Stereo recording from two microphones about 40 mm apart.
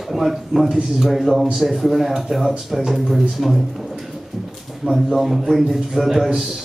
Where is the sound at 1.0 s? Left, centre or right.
Centre.